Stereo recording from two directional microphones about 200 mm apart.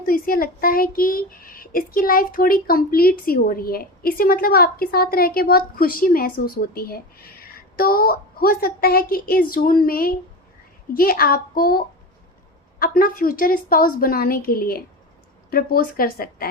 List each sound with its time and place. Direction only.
0.0 s speech: 45° left (ahead or behind)
12.8 s speech: 45° left (ahead or behind)